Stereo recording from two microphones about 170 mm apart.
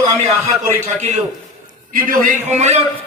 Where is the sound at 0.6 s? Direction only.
45° right (ahead or behind).